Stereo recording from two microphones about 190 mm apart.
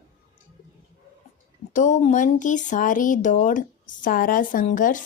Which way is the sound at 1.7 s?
40° left (ahead or behind).